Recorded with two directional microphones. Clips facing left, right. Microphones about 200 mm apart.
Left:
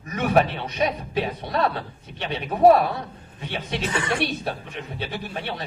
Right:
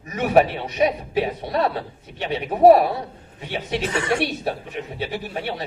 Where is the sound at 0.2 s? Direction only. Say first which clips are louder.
Right 3 dB; 10° right (ahead or behind).